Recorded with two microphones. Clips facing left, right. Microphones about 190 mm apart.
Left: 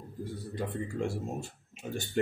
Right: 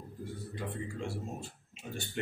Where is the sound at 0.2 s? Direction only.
40° left (ahead or behind).